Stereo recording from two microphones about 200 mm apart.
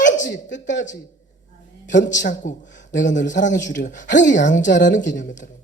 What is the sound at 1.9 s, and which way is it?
A man's voice, 40° left (ahead or behind).